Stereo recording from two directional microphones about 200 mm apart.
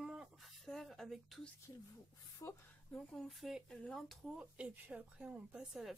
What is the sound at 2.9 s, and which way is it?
Speech, centre (ahead or behind).